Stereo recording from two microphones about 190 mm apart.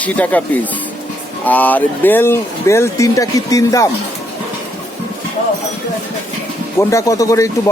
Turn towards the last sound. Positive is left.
turn(degrees=15)  # may be behind; listen again after turning